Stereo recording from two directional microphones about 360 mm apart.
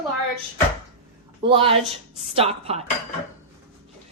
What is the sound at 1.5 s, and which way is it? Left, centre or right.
A woman's voice, centre.